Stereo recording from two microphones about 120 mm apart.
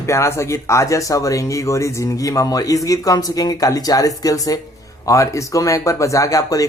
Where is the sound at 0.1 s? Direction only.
25° left (ahead or behind).